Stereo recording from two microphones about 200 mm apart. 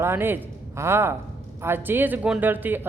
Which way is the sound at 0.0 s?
10° right (ahead or behind).